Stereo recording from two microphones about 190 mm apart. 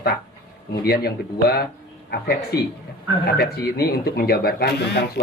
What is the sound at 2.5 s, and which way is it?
Speech, 60° left (ahead or behind).